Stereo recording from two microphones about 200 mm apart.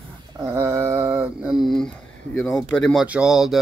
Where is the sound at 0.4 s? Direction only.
15° right (ahead or behind).